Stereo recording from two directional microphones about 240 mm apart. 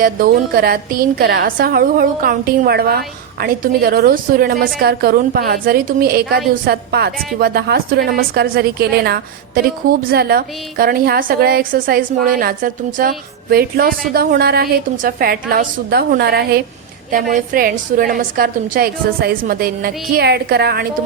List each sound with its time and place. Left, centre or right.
0.0 s a woman's voice: right